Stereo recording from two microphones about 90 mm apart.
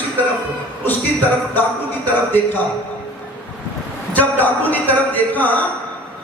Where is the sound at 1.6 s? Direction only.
20° left (ahead or behind).